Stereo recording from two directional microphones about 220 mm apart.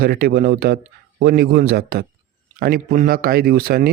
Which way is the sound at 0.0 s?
45° right (ahead or behind).